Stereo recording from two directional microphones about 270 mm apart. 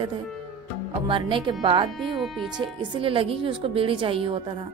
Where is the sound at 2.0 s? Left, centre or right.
Centre.